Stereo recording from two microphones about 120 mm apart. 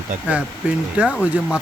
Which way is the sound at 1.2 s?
10° right (ahead or behind).